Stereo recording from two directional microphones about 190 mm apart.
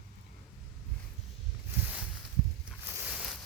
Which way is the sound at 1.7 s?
10° right (ahead or behind).